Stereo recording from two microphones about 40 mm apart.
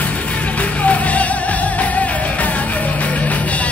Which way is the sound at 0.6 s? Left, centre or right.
Left.